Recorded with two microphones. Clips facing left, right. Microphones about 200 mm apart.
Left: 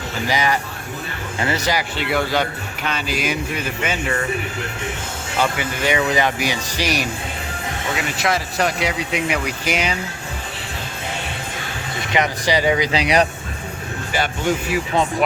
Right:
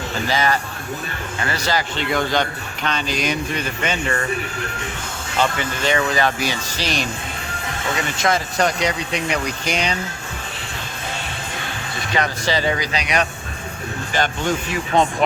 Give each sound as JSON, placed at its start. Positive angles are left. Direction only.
{"t": 0.3, "sound": "speech", "side_deg": 15}
{"t": 5.4, "sound": "speech", "side_deg": 10}
{"t": 12.1, "sound": "speech", "side_deg": 15}
{"t": 14.1, "sound": "speech", "side_deg": 10}